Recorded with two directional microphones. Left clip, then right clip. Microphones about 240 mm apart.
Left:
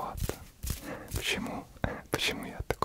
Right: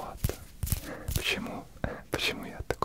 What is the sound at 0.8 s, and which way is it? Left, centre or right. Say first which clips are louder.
Whispering: right 2 dB; centre.